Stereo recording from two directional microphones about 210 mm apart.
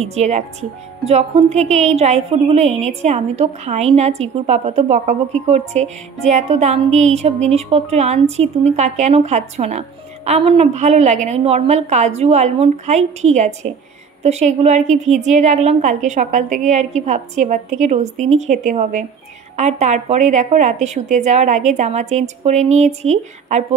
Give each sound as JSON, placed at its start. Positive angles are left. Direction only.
{"t": 0.0, "sound": "speech", "side_deg": -30}